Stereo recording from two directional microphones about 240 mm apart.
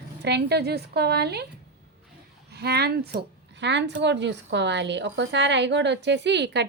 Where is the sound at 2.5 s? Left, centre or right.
Right.